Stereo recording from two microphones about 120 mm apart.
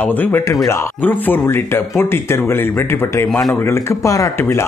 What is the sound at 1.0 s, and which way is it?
Speech, 15° left (ahead or behind).